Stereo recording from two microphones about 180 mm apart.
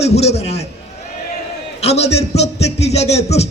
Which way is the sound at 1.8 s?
35° left (ahead or behind).